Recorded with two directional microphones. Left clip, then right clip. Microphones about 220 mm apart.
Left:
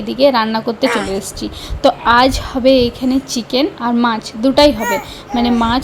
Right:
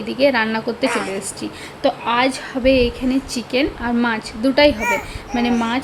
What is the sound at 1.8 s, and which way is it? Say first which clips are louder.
A woman's voice: left 7 dB; 25° left (ahead or behind).